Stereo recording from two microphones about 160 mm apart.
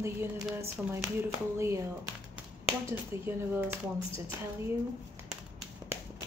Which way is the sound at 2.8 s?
15° right (ahead or behind).